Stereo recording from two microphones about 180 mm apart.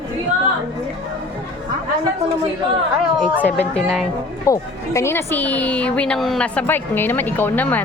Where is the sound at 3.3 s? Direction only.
10° left (ahead or behind).